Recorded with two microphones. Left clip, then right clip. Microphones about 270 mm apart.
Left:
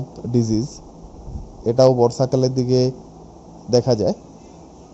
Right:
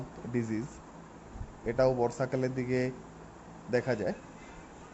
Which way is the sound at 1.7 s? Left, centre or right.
Centre.